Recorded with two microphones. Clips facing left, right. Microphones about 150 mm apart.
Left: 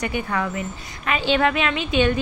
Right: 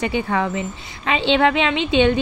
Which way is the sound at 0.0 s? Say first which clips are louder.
Right 4 dB; 25° right (ahead or behind).